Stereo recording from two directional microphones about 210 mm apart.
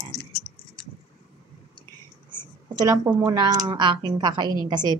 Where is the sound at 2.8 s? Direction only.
10° right (ahead or behind).